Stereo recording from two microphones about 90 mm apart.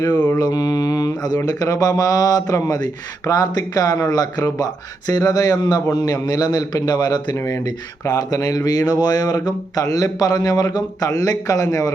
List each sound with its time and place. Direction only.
0.1 s mantra: 25° left (ahead or behind)
0.3 s mantra: 50° left (ahead or behind)
1.5 s speech: 45° left (ahead or behind)
7.3 s speech: 35° left (ahead or behind)